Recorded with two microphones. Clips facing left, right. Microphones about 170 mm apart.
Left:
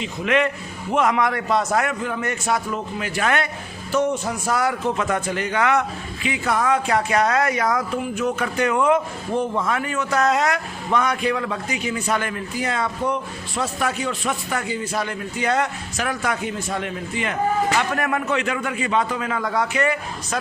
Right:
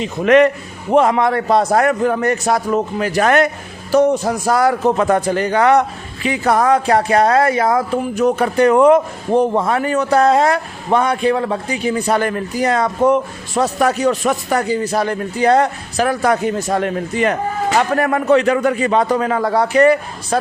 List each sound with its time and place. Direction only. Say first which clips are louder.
0.0 s a man's voice: right 9 dB; 45° right (ahead or behind)